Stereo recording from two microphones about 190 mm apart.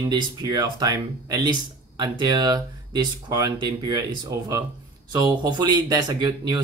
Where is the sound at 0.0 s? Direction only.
20° right (ahead or behind).